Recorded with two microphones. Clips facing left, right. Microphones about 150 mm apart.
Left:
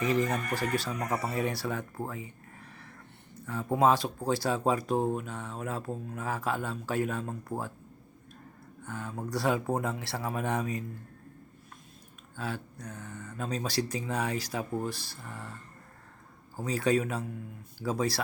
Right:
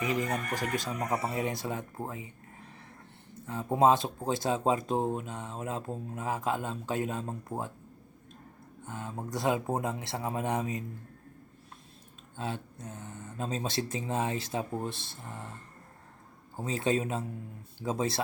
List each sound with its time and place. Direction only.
0.0 s speech: 15° right (ahead or behind)
8.8 s speech: 20° right (ahead or behind)
12.4 s speech: 25° right (ahead or behind)
16.6 s speech: 25° right (ahead or behind)